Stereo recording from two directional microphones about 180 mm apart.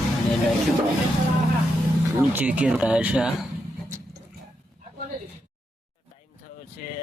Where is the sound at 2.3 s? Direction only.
10° right (ahead or behind).